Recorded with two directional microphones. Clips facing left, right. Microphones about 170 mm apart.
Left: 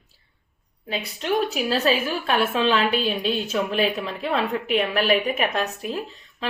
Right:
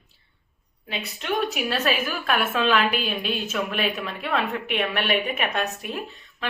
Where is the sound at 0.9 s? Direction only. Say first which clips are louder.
Left 3 dB; 35° left (ahead or behind).